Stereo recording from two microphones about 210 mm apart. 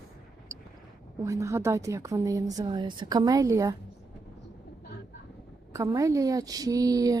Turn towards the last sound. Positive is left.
turn(degrees=-15)  # may be behind; listen again after turning